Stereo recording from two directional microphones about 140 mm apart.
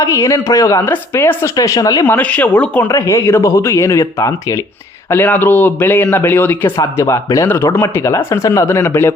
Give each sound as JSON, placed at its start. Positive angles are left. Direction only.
{"t": 0.0, "sound": "speech", "side_deg": 20}
{"t": 2.0, "sound": "speech", "side_deg": 10}